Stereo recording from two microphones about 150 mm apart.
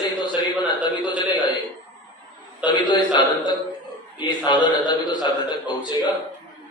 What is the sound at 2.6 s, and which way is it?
A man's voice, 30° left (ahead or behind).